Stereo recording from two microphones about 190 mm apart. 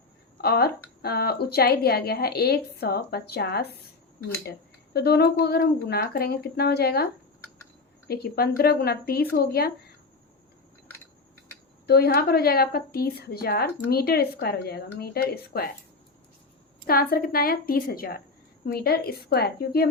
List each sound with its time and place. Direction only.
0.4 s a woman's voice: 55° left (ahead or behind)
4.9 s a woman's voice: 55° left (ahead or behind)
11.9 s a woman's voice: 55° left (ahead or behind)
16.8 s a woman's voice: 50° left (ahead or behind)